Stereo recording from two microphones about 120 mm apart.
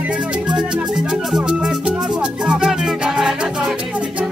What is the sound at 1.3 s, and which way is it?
Music, 10° right (ahead or behind).